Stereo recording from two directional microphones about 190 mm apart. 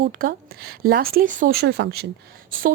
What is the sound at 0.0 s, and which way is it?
A woman's voice, 50° right (ahead or behind).